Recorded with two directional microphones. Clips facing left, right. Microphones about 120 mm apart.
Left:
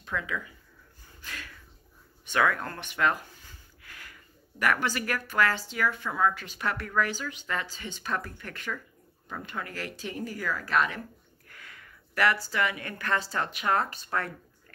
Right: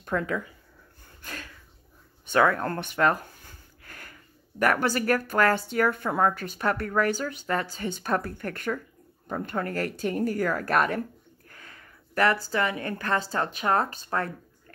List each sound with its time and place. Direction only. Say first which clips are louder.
0.0 s speech: right 6 dB; 45° right (ahead or behind)
2.3 s speech: right 4 dB; 35° right (ahead or behind)
11.4 s a woman's voice: even; 35° right (ahead or behind)